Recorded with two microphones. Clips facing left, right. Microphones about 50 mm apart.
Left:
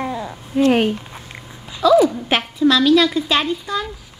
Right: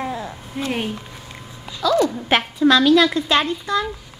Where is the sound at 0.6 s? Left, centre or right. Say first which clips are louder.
Left 10 dB; left.